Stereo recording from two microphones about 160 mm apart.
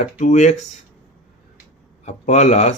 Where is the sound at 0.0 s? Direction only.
50° left (ahead or behind).